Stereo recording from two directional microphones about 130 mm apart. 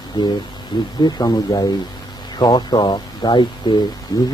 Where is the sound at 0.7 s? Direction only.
35° left (ahead or behind).